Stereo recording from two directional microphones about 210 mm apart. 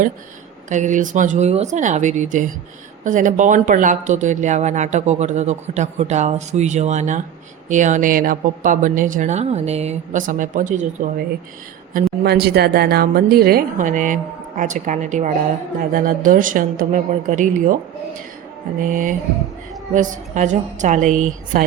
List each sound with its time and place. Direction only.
0.7 s speech: 35° right (ahead or behind)
11.9 s a woman's voice: 50° right (ahead or behind)
18.8 s speech: 40° right (ahead or behind)